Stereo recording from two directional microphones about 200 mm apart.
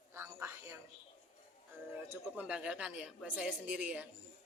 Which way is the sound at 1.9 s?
5° right (ahead or behind).